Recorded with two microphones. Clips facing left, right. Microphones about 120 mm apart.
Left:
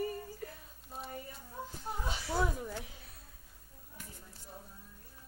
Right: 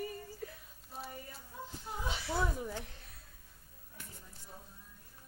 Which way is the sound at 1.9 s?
45° left (ahead or behind).